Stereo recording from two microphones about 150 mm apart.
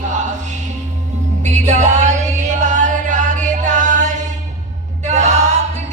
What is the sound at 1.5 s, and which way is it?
Music, 50° right (ahead or behind).